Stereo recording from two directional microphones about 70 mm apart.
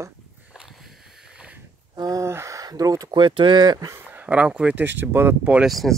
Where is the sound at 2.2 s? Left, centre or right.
Right.